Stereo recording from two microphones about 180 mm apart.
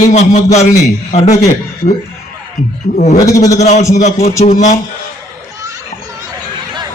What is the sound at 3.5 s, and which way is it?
A man's voice, 40° left (ahead or behind).